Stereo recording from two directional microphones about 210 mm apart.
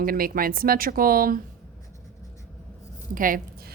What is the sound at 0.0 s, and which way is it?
A woman's voice, 45° right (ahead or behind).